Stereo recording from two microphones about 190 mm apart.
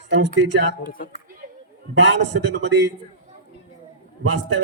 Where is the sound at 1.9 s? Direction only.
70° right (ahead or behind).